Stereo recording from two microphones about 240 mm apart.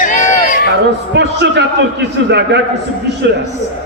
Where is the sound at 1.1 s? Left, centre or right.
Right.